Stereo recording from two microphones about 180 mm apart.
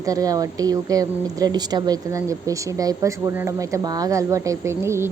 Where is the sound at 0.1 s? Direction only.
20° right (ahead or behind).